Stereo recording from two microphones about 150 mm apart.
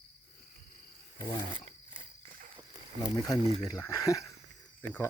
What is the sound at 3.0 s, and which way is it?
Speech, 25° left (ahead or behind).